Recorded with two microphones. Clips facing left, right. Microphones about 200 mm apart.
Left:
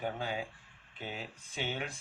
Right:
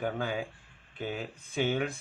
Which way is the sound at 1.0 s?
50° right (ahead or behind).